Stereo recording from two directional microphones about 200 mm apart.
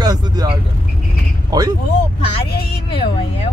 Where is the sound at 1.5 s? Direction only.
20° right (ahead or behind).